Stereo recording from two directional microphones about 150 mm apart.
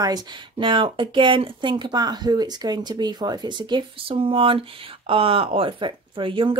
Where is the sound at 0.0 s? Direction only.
30° right (ahead or behind).